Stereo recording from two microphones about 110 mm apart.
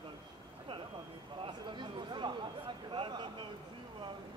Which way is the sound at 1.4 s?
45° right (ahead or behind).